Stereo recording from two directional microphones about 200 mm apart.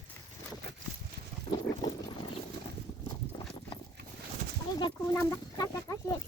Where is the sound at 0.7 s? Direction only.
55° right (ahead or behind).